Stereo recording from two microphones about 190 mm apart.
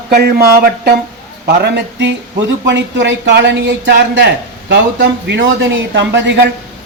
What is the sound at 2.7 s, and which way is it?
A man's voice, 75° right (ahead or behind).